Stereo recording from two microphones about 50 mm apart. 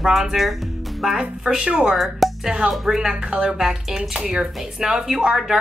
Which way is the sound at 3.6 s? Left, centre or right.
Centre.